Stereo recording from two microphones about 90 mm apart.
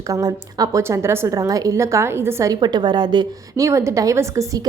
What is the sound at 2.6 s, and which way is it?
Speech, 50° right (ahead or behind).